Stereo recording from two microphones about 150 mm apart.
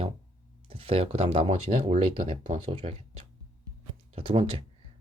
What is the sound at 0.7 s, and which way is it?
Speech, 40° right (ahead or behind).